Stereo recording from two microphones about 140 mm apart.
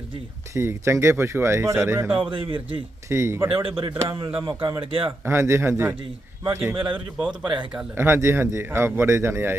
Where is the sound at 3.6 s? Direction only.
40° right (ahead or behind).